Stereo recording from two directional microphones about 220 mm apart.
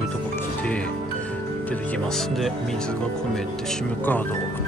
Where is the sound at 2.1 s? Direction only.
Centre (ahead or behind).